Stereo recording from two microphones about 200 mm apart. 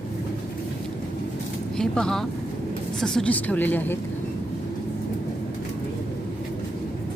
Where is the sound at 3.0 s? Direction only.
5° left (ahead or behind).